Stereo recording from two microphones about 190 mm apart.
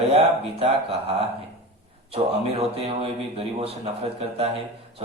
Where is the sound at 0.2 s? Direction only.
30° right (ahead or behind).